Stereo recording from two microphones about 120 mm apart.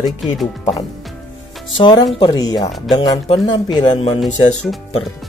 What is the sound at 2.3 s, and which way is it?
Speech, 35° left (ahead or behind).